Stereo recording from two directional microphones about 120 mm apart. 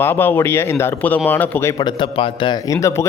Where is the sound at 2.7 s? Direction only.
25° left (ahead or behind).